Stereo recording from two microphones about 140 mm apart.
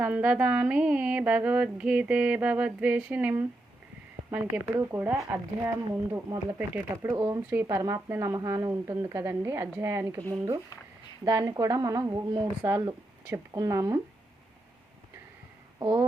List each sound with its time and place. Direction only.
0.0 s a sound: 10° right (ahead or behind)
7.2 s speech: 20° right (ahead or behind)
11.3 s speech: 25° right (ahead or behind)
15.8 s speech: 35° right (ahead or behind)